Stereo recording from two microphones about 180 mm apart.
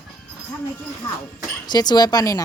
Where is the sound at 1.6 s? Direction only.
20° left (ahead or behind).